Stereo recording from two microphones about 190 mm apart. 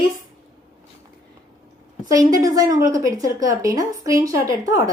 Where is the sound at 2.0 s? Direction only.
20° right (ahead or behind).